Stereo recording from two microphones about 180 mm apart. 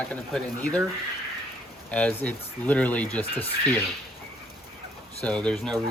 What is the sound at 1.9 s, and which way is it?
Speech, 10° left (ahead or behind).